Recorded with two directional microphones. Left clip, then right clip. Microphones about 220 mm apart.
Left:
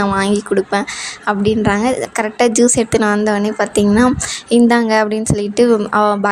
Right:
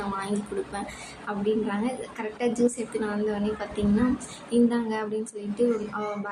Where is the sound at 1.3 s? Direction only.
50° left (ahead or behind).